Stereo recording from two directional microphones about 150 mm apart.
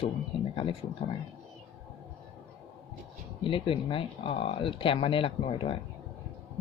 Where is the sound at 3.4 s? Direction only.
35° left (ahead or behind).